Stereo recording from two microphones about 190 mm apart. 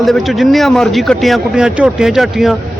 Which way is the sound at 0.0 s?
Centre (ahead or behind).